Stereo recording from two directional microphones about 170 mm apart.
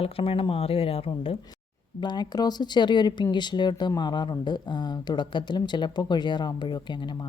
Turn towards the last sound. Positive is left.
turn(degrees=25)  # may be behind; listen again after turning